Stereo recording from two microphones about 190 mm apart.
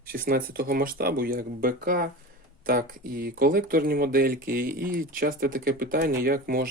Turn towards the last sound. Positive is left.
turn(degrees=-50)  # may be behind; listen again after turning